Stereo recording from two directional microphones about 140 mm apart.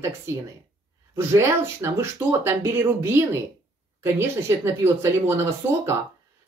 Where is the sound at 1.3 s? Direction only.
20° right (ahead or behind).